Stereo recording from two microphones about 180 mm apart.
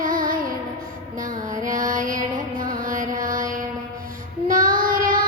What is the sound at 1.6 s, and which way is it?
Female singing, 50° right (ahead or behind).